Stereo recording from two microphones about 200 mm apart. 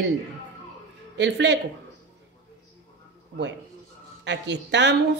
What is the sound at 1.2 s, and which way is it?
Speech, 60° right (ahead or behind).